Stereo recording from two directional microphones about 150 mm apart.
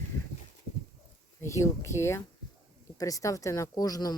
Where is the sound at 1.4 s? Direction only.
20° left (ahead or behind).